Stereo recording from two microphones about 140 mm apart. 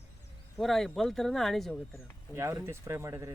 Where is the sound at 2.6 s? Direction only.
20° right (ahead or behind).